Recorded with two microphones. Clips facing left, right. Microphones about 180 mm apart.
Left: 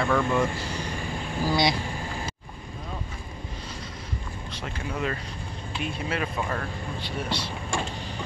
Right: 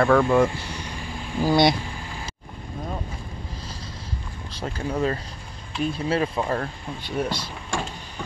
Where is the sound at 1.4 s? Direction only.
55° right (ahead or behind).